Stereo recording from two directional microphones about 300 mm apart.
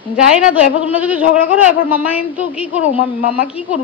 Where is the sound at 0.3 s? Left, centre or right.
Centre.